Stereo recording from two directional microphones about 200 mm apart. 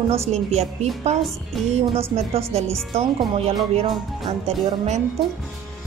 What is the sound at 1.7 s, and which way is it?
Speech, 35° right (ahead or behind).